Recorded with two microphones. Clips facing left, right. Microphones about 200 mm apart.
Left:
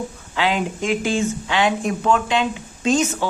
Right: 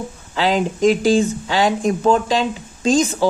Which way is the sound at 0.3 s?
40° right (ahead or behind).